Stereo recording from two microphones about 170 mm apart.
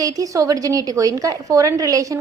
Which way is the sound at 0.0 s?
20° right (ahead or behind).